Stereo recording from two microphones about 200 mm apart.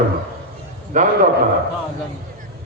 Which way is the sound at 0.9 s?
40° right (ahead or behind).